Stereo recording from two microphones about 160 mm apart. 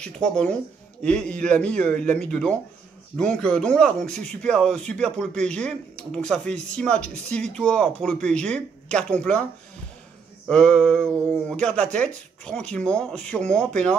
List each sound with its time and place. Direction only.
0.0 s a man's voice: 5° left (ahead or behind)
10.5 s speech: 5° left (ahead or behind)